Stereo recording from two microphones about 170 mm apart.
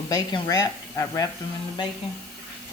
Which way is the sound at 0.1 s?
20° left (ahead or behind).